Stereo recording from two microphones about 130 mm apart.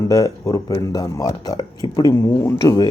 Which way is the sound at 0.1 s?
30° left (ahead or behind).